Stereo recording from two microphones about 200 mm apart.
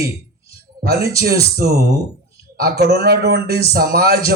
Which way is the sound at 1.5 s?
50° right (ahead or behind).